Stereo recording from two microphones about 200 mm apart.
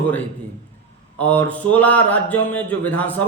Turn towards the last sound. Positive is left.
turn(degrees=10)  # may be behind; listen again after turning